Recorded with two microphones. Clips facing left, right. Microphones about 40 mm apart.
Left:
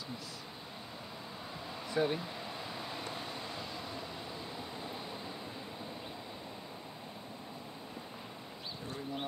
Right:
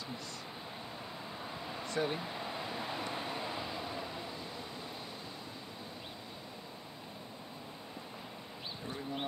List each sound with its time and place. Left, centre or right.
1.9 s speech: centre
2.1 s vehicle: centre
8.8 s bird: centre